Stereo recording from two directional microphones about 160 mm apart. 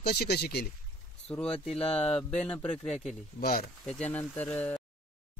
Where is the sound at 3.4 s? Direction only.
70° left (ahead or behind).